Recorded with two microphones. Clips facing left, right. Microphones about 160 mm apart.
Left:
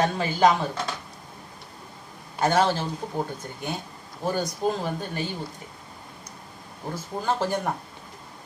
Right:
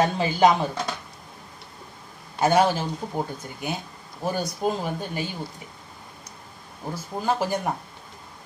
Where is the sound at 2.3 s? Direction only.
10° right (ahead or behind).